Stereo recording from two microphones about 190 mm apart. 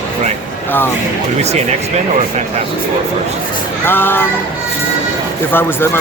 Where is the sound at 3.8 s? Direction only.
10° left (ahead or behind).